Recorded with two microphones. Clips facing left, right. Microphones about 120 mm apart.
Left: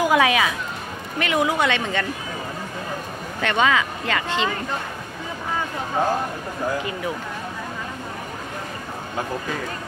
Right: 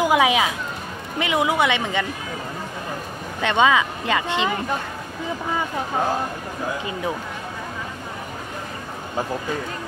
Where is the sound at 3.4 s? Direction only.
20° right (ahead or behind).